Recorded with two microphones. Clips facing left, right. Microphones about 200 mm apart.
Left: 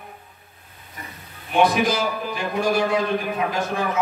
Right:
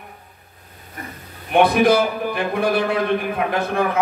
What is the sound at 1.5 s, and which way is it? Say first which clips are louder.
A man's voice: right 5 dB; 60° right (ahead or behind).